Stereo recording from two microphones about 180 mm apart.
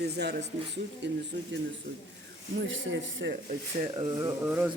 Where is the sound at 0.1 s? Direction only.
70° right (ahead or behind).